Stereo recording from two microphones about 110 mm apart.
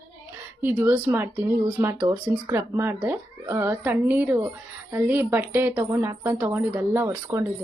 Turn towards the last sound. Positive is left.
turn(degrees=-25)  # may be behind; listen again after turning